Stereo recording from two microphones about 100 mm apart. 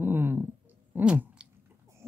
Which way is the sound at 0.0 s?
20° right (ahead or behind).